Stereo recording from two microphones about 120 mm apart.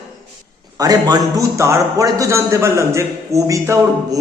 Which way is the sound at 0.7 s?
30° right (ahead or behind).